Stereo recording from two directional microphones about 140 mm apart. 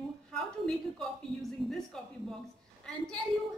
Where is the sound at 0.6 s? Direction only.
5° left (ahead or behind).